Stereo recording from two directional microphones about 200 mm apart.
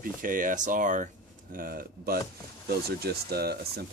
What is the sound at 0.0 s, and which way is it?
Speech, 45° right (ahead or behind).